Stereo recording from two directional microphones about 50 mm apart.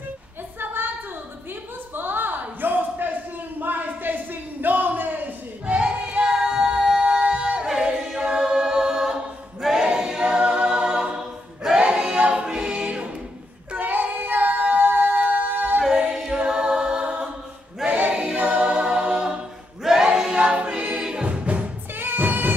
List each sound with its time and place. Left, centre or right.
2.0 s a sound: right
5.7 s music: right
6.3 s a sound: centre
7.6 s a capella: centre
11.8 s choir: centre
13.7 s child singing: right
15.1 s music: right
15.9 s a capella: centre
17.8 s choir: right
18.1 s music: right
19.8 s choir: centre
20.2 s music: centre
21.9 s music: right